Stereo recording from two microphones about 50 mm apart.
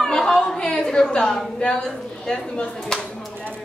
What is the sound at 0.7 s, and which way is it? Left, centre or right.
A woman's voice, centre.